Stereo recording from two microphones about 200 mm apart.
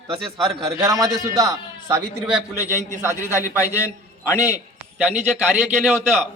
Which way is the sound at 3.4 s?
15° left (ahead or behind).